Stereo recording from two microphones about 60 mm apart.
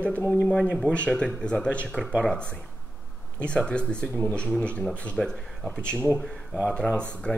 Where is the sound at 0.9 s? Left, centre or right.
Centre.